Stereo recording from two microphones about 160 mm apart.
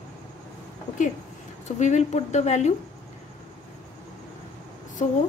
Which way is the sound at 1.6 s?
50° left (ahead or behind).